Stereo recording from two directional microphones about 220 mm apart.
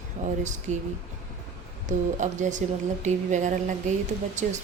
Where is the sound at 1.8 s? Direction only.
35° right (ahead or behind).